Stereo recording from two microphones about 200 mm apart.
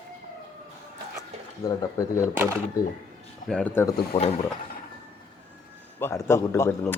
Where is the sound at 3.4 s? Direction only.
5° left (ahead or behind).